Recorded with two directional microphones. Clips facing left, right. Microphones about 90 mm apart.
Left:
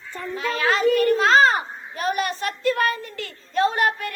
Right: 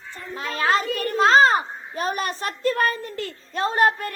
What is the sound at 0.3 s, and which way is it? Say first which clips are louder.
Speech: right 1 dB; 40° right (ahead or behind).